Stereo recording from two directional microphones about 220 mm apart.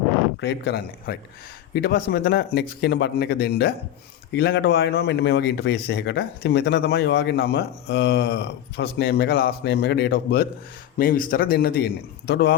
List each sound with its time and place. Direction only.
0.4 s speech: 50° left (ahead or behind)